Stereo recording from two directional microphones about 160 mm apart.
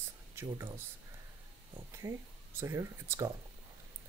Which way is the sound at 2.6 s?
15° right (ahead or behind).